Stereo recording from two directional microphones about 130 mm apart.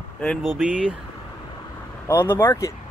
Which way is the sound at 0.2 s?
5° left (ahead or behind).